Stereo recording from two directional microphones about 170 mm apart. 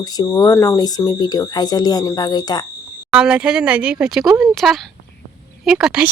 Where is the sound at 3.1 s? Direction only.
5° right (ahead or behind).